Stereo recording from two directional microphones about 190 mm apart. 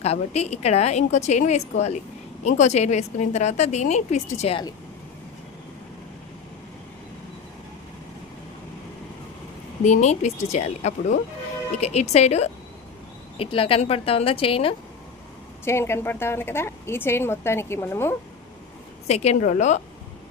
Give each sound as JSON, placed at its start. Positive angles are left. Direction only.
{"t": 0.0, "sound": "a woman's voice", "side_deg": 35}
{"t": 9.8, "sound": "a woman's voice", "side_deg": 40}
{"t": 15.6, "sound": "speech", "side_deg": 15}
{"t": 19.0, "sound": "a woman's voice", "side_deg": 35}